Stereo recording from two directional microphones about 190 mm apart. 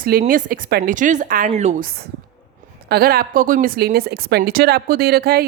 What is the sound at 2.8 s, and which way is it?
Speech, 55° right (ahead or behind).